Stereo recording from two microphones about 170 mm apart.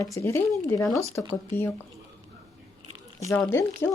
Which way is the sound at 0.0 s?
15° left (ahead or behind).